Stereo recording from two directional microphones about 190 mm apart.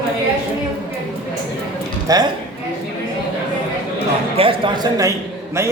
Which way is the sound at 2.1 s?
20° right (ahead or behind).